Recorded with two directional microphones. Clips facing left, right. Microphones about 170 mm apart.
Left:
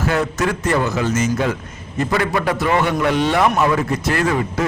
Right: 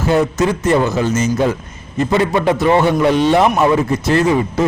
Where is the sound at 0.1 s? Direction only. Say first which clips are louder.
Right 7 dB; 25° right (ahead or behind).